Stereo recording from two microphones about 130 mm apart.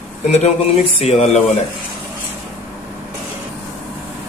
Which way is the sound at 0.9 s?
55° left (ahead or behind).